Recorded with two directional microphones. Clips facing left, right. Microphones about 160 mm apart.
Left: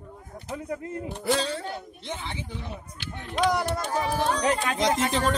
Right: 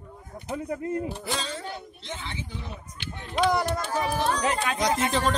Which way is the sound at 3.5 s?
15° left (ahead or behind).